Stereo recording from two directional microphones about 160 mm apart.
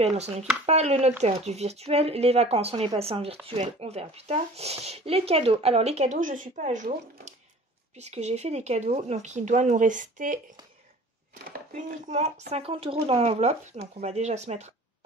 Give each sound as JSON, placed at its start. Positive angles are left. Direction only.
{"t": 0.0, "sound": "speech", "side_deg": -40}
{"t": 11.7, "sound": "speech", "side_deg": -40}